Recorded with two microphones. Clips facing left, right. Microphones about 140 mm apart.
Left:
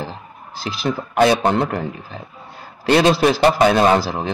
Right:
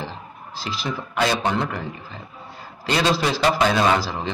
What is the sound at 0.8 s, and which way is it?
A man's voice, 55° left (ahead or behind).